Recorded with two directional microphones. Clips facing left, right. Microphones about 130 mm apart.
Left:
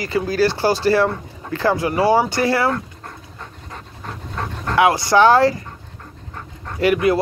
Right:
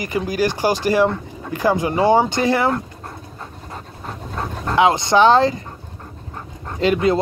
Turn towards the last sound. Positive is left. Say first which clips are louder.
# left 1 dB
turn(degrees=-25)  # may be behind; listen again after turning